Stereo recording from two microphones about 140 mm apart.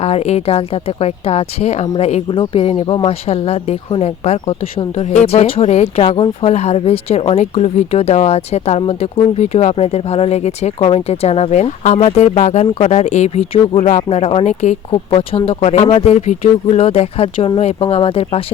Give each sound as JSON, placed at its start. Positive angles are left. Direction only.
{"t": 0.0, "sound": "speech", "side_deg": 50}
{"t": 2.3, "sound": "speech", "side_deg": 40}